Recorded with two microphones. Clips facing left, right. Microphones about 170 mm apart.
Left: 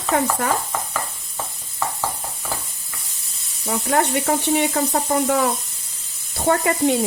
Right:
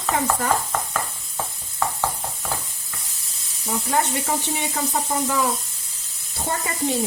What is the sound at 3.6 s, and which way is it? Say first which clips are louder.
Speech: left 3 dB; 65° left (ahead or behind).